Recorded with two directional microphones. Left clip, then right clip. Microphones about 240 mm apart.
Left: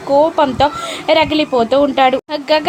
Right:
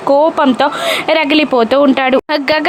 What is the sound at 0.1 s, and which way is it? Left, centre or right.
A woman's voice, centre.